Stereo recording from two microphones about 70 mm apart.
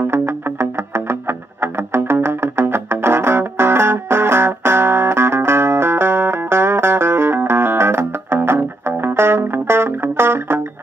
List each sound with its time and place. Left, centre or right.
0.0 s music: right